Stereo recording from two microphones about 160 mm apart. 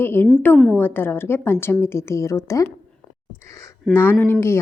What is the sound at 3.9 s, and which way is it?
Speech, 15° left (ahead or behind).